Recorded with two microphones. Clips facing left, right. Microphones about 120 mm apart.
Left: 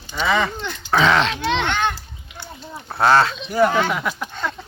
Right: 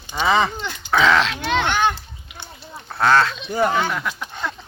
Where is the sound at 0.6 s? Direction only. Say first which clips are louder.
Even; 5° left (ahead or behind).